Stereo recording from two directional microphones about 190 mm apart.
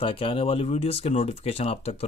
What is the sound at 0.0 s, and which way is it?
Speech, 30° left (ahead or behind).